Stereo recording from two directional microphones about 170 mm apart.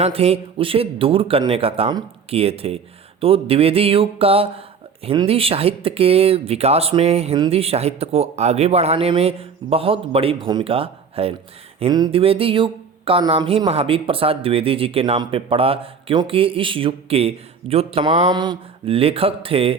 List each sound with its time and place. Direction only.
0.0 s speech: 35° right (ahead or behind)
11.8 s speech: 25° right (ahead or behind)